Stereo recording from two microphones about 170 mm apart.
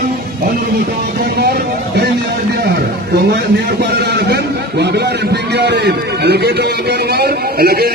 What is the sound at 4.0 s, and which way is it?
A man's voice, 75° right (ahead or behind).